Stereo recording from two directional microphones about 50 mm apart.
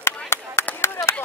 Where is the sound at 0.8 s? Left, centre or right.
Left.